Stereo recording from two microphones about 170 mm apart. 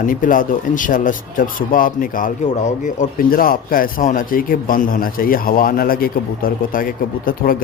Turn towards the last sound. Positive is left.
turn(degrees=55)  # may be behind; listen again after turning